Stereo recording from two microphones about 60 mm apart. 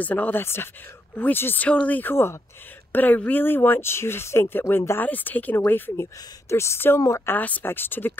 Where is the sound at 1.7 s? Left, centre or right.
Left.